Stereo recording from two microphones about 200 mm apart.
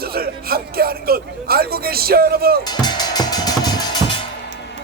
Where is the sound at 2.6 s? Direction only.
20° left (ahead or behind).